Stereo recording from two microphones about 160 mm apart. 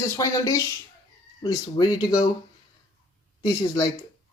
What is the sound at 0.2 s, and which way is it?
Speech, 20° left (ahead or behind).